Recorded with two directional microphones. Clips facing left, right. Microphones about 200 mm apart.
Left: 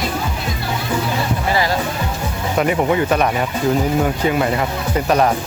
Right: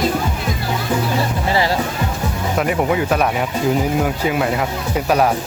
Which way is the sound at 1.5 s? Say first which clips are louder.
Right 1 dB; 30° right (ahead or behind).